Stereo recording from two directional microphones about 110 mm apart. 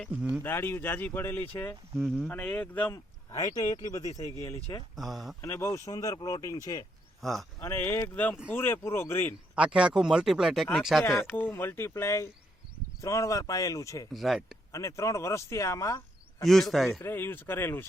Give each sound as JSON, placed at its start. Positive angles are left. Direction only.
{"t": 0.1, "sound": "speech", "side_deg": -10}
{"t": 0.4, "sound": "speech", "side_deg": 20}
{"t": 2.0, "sound": "speech", "side_deg": 5}
{"t": 2.9, "sound": "speech", "side_deg": 35}
{"t": 4.9, "sound": "speech", "side_deg": 0}
{"t": 5.4, "sound": "speech", "side_deg": 25}
{"t": 7.2, "sound": "speech", "side_deg": 0}
{"t": 7.6, "sound": "speech", "side_deg": 20}
{"t": 9.6, "sound": "speech", "side_deg": -10}
{"t": 11.2, "sound": "speech", "side_deg": 15}
{"t": 14.1, "sound": "speech", "side_deg": 0}
{"t": 14.7, "sound": "speech", "side_deg": 30}
{"t": 16.4, "sound": "speech", "side_deg": 0}
{"t": 17.0, "sound": "speech", "side_deg": 20}